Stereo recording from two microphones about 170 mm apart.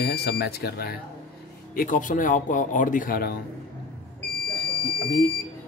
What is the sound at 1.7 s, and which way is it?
Speech, 50° left (ahead or behind).